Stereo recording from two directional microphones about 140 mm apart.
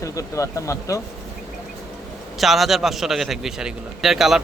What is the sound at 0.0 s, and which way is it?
Speech, 20° left (ahead or behind).